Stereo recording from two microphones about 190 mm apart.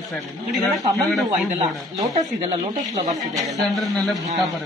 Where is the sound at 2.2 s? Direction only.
40° right (ahead or behind).